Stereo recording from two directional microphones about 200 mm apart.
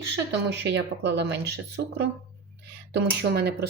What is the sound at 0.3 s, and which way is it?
Speech, 60° right (ahead or behind).